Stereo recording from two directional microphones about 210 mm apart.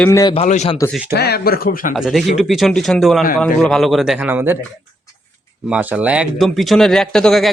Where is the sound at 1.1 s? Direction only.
50° left (ahead or behind).